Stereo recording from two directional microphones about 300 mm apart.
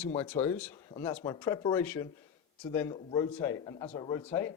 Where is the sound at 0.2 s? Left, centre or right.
Centre.